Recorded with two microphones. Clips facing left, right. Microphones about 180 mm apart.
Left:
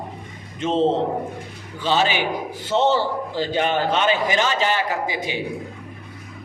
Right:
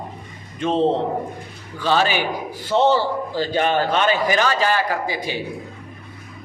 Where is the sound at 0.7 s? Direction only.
15° right (ahead or behind).